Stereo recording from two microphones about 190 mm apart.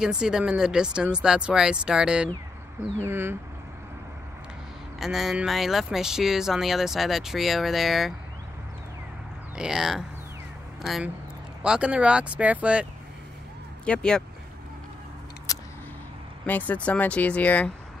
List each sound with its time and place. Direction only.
0.0 s speech: 5° right (ahead or behind)
5.0 s speech: centre (ahead or behind)
9.6 s speech: 5° right (ahead or behind)
11.6 s speech: 5° right (ahead or behind)
13.8 s speech: 5° left (ahead or behind)
15.5 s a sound: 20° left (ahead or behind)
16.4 s speech: 10° left (ahead or behind)